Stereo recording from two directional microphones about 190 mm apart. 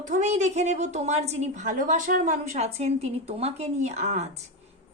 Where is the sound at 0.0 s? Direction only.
40° right (ahead or behind).